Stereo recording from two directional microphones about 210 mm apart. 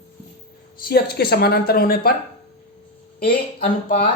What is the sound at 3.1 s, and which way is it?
Speech, 45° left (ahead or behind).